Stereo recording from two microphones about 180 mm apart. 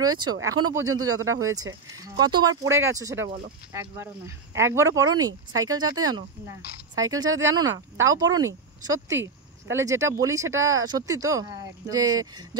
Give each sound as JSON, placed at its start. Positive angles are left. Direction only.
{"t": 0.0, "sound": "speech", "side_deg": -20}
{"t": 4.6, "sound": "speech", "side_deg": -15}